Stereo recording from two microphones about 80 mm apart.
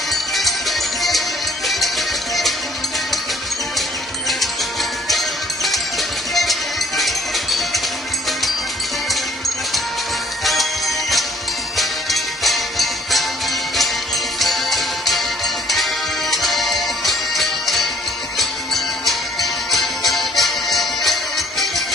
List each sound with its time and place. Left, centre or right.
0.1 s music: centre
4.3 s music: centre
10.4 s music: centre
14.3 s music: centre